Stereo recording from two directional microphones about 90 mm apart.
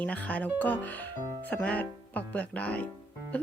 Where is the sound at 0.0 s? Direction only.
15° left (ahead or behind).